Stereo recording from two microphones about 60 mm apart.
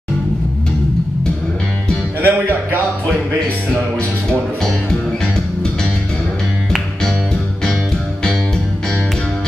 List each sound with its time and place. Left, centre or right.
2.2 s music: right
4.6 s music: centre
6.7 s music: centre